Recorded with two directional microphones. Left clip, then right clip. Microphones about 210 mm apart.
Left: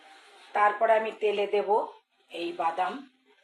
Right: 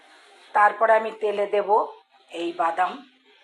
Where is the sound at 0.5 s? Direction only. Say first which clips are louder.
Right 5 dB; 15° right (ahead or behind).